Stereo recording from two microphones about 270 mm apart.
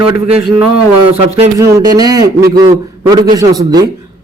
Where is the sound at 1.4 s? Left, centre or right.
Centre.